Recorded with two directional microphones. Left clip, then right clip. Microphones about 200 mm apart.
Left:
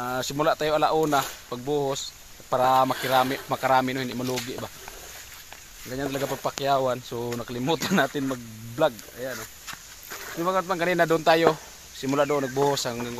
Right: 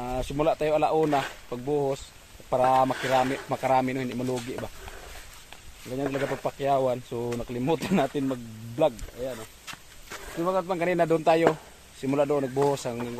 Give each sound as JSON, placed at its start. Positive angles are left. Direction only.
{"t": 0.0, "sound": "speech", "side_deg": 0}
{"t": 5.9, "sound": "speech", "side_deg": 0}